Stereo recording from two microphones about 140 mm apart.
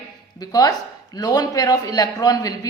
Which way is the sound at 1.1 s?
25° left (ahead or behind).